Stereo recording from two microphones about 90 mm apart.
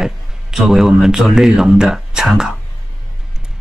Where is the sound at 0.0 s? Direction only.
5° right (ahead or behind).